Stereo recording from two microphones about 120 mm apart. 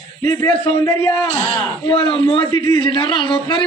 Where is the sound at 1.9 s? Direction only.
45° left (ahead or behind).